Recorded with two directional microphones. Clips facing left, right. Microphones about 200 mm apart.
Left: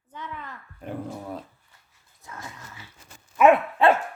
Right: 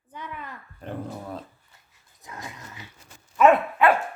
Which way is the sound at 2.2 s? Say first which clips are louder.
Right 1 dB; 15° right (ahead or behind).